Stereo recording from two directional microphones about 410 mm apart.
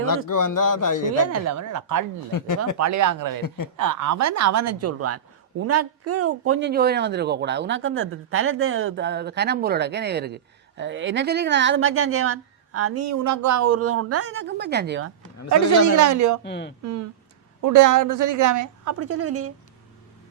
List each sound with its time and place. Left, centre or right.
0.3 s speech: left
1.3 s a woman's voice: right
2.3 s speech: left
2.7 s a woman's voice: right
16.0 s a woman's voice: right
16.4 s speech: left
17.6 s a woman's voice: right